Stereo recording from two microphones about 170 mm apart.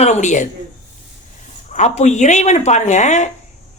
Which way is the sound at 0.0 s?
45° left (ahead or behind).